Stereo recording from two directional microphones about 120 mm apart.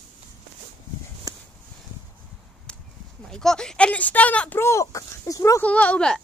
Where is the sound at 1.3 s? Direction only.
30° right (ahead or behind).